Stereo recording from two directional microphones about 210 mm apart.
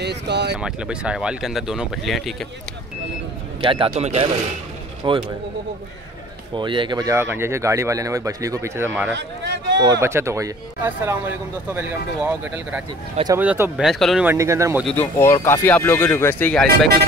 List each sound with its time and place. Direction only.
0.0 s a sound: 55° right (ahead or behind)
0.6 s speech: 5° right (ahead or behind)
3.6 s a man's voice: 25° right (ahead or behind)
5.0 s a man's voice: 20° right (ahead or behind)
6.5 s speech: 25° right (ahead or behind)
9.1 s a sound: 55° right (ahead or behind)
9.8 s speech: 15° right (ahead or behind); by 14.3 s centre (ahead or behind)
14.3 s speech: 15° right (ahead or behind)
14.9 s speech: 10° left (ahead or behind)